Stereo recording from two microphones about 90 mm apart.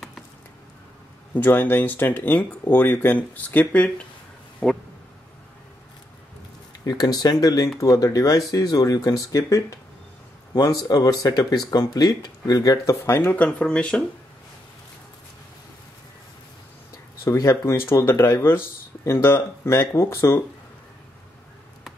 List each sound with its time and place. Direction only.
1.3 s speech: 20° left (ahead or behind)
6.9 s speech: 45° left (ahead or behind)
10.5 s speech: 45° left (ahead or behind); by 14.0 s 10° left (ahead or behind)
17.2 s speech: 35° left (ahead or behind)